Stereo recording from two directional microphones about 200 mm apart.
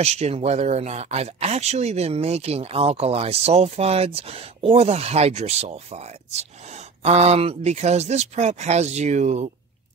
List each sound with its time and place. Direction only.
0.0 s speech: 30° right (ahead or behind)